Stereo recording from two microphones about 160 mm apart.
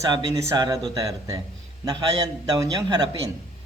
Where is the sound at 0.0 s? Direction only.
25° right (ahead or behind).